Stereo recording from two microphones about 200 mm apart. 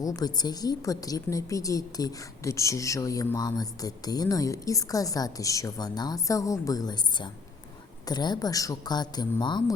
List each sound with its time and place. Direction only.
0.0 s a woman's voice: 20° left (ahead or behind)